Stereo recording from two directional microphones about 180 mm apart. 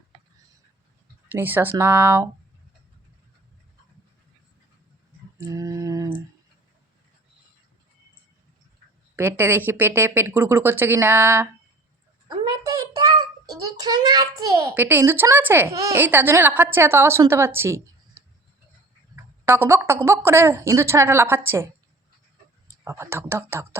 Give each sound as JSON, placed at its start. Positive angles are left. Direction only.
{"t": 1.3, "sound": "speech", "side_deg": -10}
{"t": 5.5, "sound": "a sound", "side_deg": -20}
{"t": 9.1, "sound": "a child's voice", "side_deg": -10}
{"t": 19.1, "sound": "a sound", "side_deg": -15}
{"t": 20.1, "sound": "speech", "side_deg": -15}
{"t": 22.8, "sound": "speech", "side_deg": -15}